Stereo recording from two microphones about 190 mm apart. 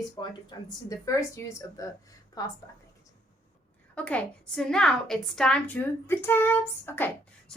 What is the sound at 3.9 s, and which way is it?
A woman's voice, 5° left (ahead or behind).